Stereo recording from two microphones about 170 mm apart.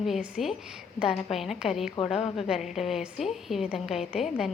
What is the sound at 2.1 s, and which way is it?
Speech, 35° left (ahead or behind).